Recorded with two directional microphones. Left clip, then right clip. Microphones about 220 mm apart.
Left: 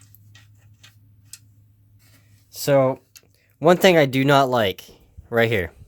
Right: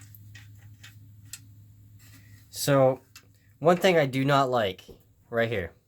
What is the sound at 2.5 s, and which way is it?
Speech, 30° left (ahead or behind).